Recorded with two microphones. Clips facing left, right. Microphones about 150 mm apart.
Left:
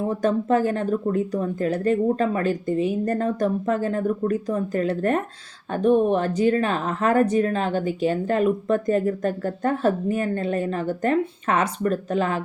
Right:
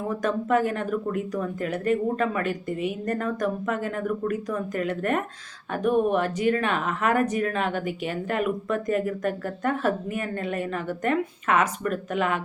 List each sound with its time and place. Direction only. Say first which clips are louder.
0.1 s speech: left 2 dB; 30° left (ahead or behind)